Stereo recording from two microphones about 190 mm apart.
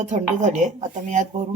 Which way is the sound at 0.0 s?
40° right (ahead or behind).